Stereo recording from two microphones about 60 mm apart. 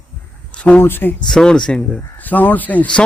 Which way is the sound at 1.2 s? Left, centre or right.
Centre.